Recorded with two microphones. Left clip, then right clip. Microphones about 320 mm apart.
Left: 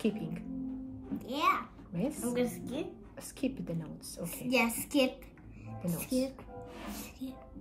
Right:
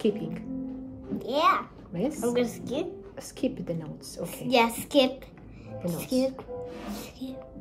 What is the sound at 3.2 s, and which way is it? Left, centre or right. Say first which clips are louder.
A woman's voice: right 6 dB; left.